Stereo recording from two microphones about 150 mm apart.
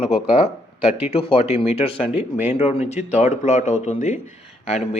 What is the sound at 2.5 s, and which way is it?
Speech, 45° left (ahead or behind).